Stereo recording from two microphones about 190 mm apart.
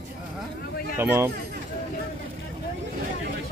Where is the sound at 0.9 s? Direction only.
15° right (ahead or behind).